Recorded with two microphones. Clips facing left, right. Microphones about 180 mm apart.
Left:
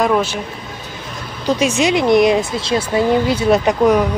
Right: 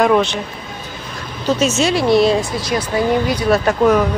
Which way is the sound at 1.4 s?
15° left (ahead or behind).